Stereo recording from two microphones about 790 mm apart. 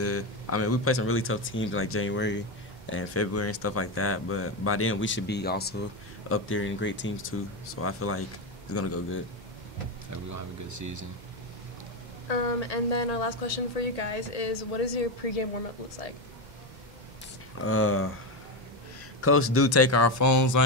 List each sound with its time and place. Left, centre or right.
0.0 s speech: centre
10.3 s speech: right
12.3 s a woman's voice: left
17.6 s speech: centre
19.2 s speech: centre